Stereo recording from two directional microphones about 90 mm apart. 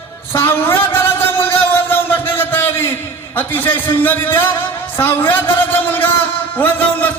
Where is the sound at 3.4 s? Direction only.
25° left (ahead or behind).